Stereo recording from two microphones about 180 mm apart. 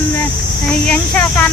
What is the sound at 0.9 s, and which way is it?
Speech, 5° left (ahead or behind).